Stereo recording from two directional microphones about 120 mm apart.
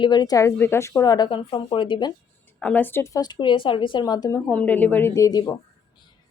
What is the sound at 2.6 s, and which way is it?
Speech, 10° left (ahead or behind).